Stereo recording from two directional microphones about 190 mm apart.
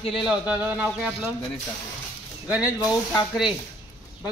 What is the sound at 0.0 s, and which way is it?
Speech, 25° left (ahead or behind).